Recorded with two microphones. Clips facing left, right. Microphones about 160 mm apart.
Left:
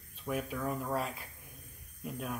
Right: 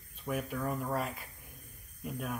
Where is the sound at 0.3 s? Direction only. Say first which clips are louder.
Even; centre (ahead or behind).